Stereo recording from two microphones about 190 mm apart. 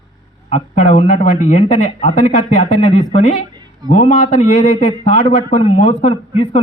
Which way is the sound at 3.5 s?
25° right (ahead or behind).